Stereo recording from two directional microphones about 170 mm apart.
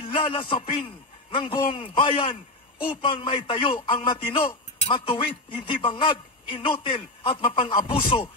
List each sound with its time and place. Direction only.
0.0 s a man's voice: 30° left (ahead or behind)